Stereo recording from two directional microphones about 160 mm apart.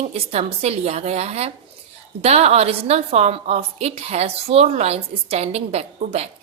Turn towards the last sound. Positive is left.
turn(degrees=-40)  # may be behind; listen again after turning